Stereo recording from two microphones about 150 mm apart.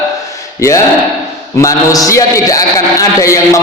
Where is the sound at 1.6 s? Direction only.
25° left (ahead or behind).